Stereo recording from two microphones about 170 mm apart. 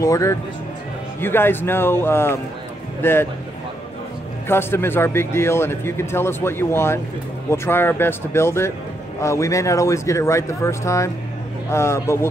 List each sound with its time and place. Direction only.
0.0 s a man's voice: 20° left (ahead or behind)
4.5 s a man's voice: 15° left (ahead or behind)